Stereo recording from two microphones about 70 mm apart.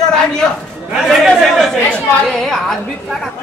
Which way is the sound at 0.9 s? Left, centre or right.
Centre.